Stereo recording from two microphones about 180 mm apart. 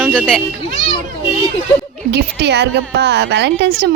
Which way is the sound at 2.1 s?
70° right (ahead or behind).